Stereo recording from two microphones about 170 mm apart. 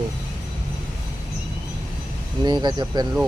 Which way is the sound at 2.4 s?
25° right (ahead or behind).